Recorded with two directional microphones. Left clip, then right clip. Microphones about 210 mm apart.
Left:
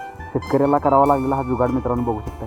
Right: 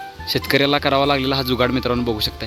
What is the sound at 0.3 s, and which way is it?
Speech, 25° right (ahead or behind).